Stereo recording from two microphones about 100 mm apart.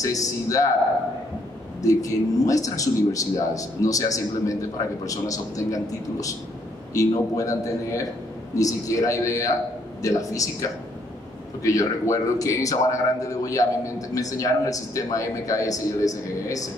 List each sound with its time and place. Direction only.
0.0 s speech: 35° left (ahead or behind)
1.8 s speech: 35° left (ahead or behind)